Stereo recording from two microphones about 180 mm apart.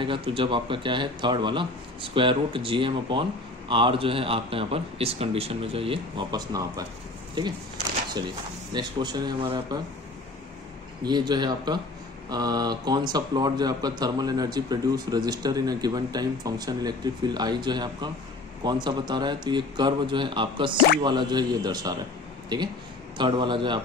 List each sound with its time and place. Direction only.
0.0 s speech: 30° right (ahead or behind)
8.7 s speech: 25° right (ahead or behind)
11.1 s speech: 25° right (ahead or behind)